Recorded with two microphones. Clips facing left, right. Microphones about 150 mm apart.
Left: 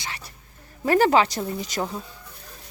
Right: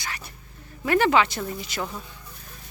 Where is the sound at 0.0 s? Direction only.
30° left (ahead or behind).